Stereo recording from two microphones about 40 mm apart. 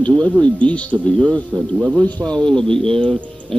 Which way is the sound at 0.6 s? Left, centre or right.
Left.